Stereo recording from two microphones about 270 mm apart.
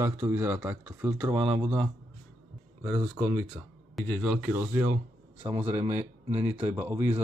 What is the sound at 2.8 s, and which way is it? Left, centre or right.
Speech, centre.